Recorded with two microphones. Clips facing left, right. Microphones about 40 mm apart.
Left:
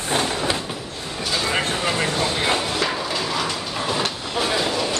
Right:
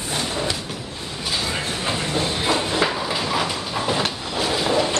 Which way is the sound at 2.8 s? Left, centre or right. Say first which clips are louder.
Right 1 dB; centre.